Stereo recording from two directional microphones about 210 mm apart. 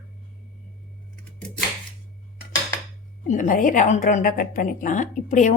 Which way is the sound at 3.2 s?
35° left (ahead or behind).